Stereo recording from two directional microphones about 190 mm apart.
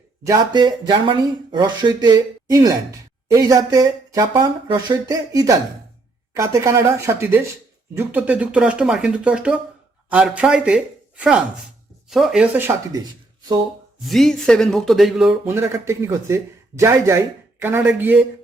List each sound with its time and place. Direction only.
0.3 s speech: 20° right (ahead or behind)
14.1 s speech: centre (ahead or behind)